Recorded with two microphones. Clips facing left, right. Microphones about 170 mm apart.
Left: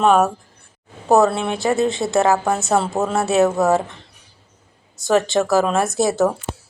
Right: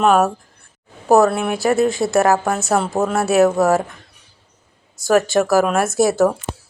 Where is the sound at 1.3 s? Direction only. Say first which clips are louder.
Right 2 dB; 25° left (ahead or behind).